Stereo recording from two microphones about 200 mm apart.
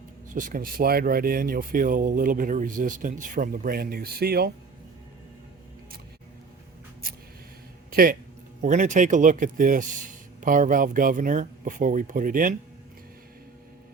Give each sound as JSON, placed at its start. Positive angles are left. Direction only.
{"t": 0.3, "sound": "speech", "side_deg": -40}
{"t": 7.9, "sound": "a sound", "side_deg": -45}
{"t": 8.6, "sound": "speech", "side_deg": -40}